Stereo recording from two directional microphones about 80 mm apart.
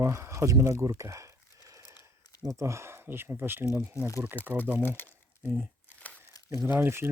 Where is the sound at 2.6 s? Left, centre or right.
Right.